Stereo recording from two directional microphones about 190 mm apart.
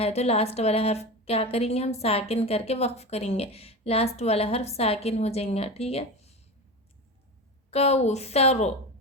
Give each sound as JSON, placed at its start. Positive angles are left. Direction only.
{"t": 0.0, "sound": "a woman's voice", "side_deg": 35}
{"t": 7.7, "sound": "a woman's voice", "side_deg": 35}